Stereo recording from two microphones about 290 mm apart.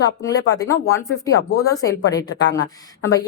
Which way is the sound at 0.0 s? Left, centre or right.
Centre.